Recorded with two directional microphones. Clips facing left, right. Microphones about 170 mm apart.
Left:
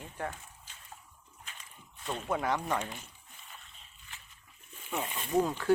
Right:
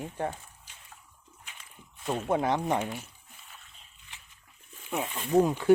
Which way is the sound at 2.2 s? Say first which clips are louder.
Right 4 dB; 25° right (ahead or behind).